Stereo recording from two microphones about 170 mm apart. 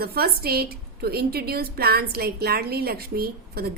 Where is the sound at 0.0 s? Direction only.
65° right (ahead or behind).